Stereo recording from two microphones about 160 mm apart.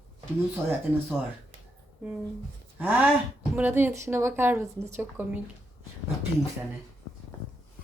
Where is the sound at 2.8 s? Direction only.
10° right (ahead or behind).